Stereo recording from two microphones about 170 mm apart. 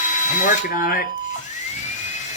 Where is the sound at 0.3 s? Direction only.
55° left (ahead or behind).